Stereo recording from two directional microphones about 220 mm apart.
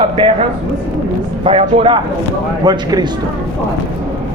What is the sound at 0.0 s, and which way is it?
Speech, 25° right (ahead or behind).